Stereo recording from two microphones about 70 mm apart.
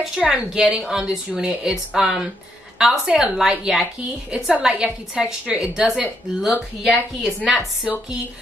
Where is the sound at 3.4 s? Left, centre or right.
Centre.